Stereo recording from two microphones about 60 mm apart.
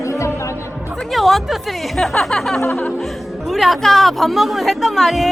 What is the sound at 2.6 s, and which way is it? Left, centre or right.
Music, left.